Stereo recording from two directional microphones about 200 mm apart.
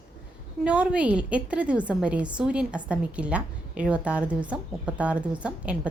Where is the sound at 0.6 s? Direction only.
5° right (ahead or behind).